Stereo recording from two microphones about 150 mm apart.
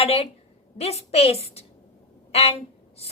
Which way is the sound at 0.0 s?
45° left (ahead or behind).